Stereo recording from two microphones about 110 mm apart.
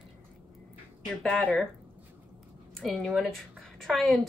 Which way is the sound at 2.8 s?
Centre (ahead or behind).